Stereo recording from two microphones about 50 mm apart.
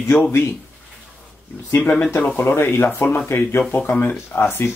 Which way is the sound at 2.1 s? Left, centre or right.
Left.